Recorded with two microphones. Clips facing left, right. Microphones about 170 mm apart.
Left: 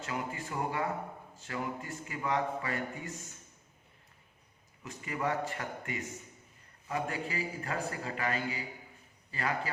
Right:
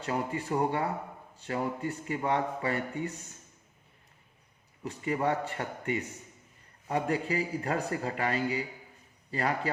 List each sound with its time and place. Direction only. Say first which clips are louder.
0.0 s speech: right 5 dB; 35° right (ahead or behind)
4.8 s speech: right 5 dB; 35° right (ahead or behind)